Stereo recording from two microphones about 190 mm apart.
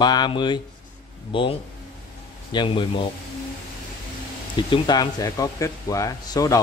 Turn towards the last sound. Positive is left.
turn(degrees=20)  # may be behind; listen again after turning